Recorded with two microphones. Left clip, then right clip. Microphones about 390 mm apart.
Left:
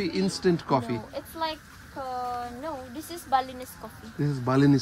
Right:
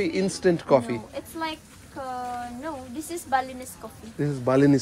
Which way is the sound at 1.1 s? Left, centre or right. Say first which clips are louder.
Even; left.